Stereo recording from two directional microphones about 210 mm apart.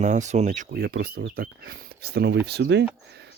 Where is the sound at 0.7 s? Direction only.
50° right (ahead or behind).